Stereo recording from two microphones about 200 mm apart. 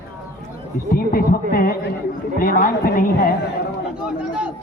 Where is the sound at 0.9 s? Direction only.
45° left (ahead or behind).